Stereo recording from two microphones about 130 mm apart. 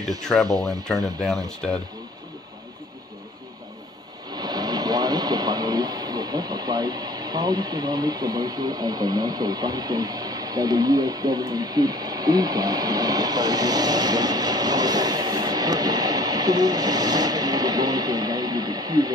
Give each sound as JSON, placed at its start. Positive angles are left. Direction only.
{"t": 0.2, "sound": "speech", "side_deg": 0}
{"t": 4.4, "sound": "speech", "side_deg": -30}